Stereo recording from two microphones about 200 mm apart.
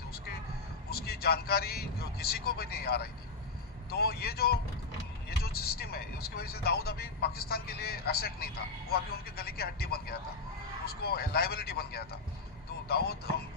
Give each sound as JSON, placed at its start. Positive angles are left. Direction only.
{"t": 0.9, "sound": "speech", "side_deg": 50}